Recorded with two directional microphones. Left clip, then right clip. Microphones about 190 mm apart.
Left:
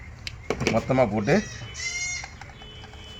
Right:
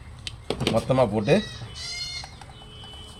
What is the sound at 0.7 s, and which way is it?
Speech, 10° right (ahead or behind).